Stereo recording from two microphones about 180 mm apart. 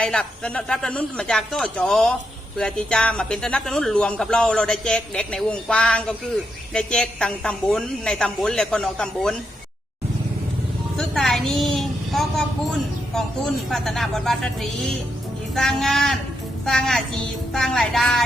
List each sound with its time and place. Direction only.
0.0 s speech: 5° left (ahead or behind)
10.9 s speech: centre (ahead or behind)